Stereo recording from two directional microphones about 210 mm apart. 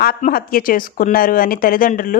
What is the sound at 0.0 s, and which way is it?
Speech, 45° left (ahead or behind).